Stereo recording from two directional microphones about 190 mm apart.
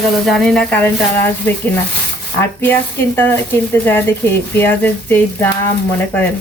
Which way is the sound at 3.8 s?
10° left (ahead or behind).